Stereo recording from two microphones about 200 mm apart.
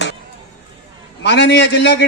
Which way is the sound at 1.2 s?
60° left (ahead or behind).